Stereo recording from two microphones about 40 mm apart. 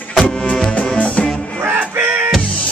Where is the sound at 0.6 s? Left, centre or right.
Left.